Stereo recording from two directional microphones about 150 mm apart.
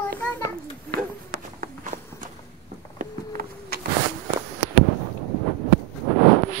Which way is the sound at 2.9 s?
75° right (ahead or behind).